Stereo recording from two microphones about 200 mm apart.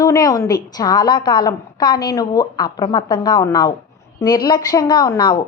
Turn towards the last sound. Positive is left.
turn(degrees=20)  # may be behind; listen again after turning